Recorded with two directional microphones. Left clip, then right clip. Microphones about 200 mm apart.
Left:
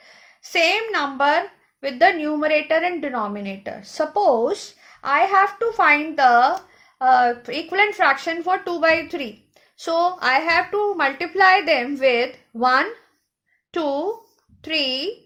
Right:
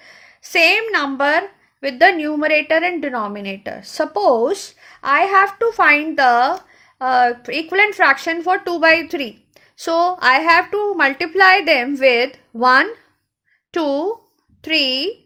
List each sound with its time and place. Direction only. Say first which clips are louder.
0.0 s a woman's voice: right 4 dB; 45° right (ahead or behind)